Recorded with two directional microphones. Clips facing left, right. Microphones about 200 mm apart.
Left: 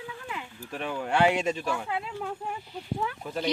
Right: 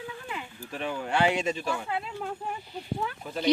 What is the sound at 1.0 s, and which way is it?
Speech, 5° left (ahead or behind).